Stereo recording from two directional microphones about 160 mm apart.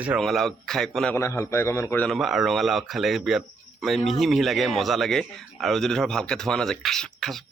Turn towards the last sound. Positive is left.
turn(degrees=0)  # may be behind; listen again after turning